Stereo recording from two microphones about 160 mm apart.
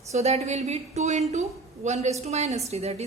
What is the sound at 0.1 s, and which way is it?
A woman's voice, 40° right (ahead or behind).